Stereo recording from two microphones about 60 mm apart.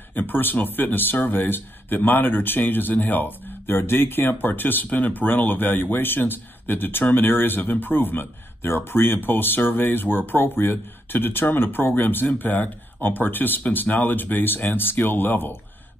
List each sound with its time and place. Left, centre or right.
0.1 s speech: left